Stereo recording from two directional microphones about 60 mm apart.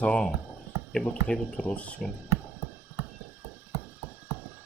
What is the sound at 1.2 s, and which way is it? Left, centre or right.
Speech, centre.